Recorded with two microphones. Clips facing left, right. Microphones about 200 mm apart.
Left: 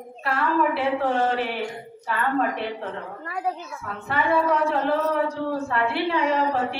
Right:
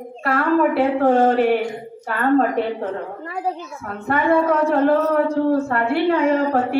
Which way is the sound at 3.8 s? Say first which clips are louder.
Right 6 dB; 50° right (ahead or behind).